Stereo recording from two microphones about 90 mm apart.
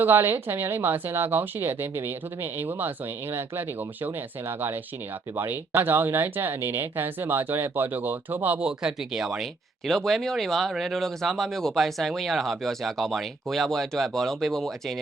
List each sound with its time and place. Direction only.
0.0 s speech: 25° right (ahead or behind)
8.5 s speech: 10° right (ahead or behind)